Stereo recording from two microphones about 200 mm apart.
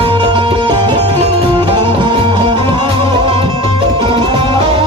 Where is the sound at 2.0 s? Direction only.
20° right (ahead or behind).